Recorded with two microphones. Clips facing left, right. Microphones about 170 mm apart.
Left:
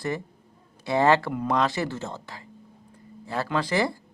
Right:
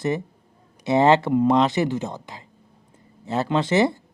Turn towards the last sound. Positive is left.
turn(degrees=-20)  # may be behind; listen again after turning